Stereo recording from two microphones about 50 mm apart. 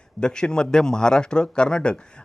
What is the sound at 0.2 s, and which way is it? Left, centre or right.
A man's voice, centre.